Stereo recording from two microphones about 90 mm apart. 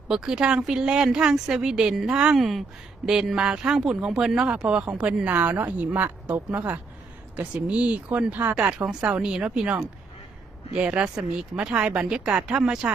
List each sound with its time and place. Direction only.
0.1 s speech: 5° right (ahead or behind)
8.8 s speech: 10° right (ahead or behind)